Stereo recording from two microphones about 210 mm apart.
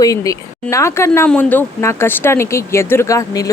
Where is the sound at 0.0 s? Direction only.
15° left (ahead or behind).